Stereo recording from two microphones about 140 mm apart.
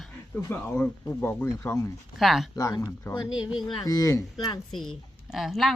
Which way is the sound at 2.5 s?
25° left (ahead or behind).